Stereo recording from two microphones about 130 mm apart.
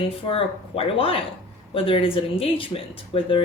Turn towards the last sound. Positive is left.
turn(degrees=45)  # may be behind; listen again after turning